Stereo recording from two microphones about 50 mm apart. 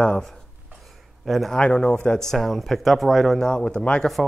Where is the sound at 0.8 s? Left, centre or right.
Centre.